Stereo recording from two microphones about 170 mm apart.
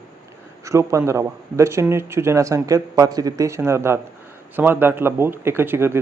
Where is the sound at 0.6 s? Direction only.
15° right (ahead or behind).